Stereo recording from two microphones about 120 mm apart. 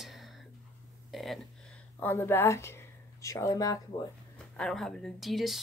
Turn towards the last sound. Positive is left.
turn(degrees=0)  # may be behind; listen again after turning